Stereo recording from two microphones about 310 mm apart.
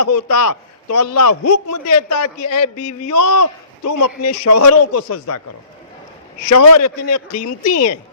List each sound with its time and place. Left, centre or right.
0.0 s a man's voice: left
6.5 s a man's voice: left